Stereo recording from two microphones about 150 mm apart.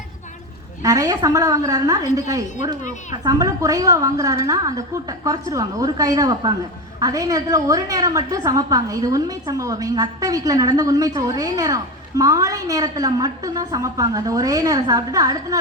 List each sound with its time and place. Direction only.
0.8 s a woman's voice: 20° right (ahead or behind)